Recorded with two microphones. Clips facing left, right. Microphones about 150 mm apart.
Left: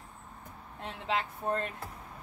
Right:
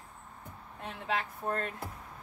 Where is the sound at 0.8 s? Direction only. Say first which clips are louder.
Left 1 dB; 25° left (ahead or behind).